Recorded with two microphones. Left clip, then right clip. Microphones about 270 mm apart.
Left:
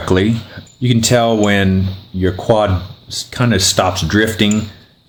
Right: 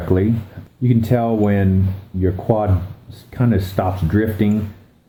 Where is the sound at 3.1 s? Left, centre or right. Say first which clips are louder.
Left 5 dB; left.